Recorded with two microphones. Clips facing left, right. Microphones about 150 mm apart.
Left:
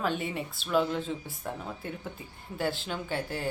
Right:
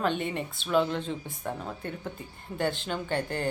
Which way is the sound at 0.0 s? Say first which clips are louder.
Right 2 dB; 5° left (ahead or behind).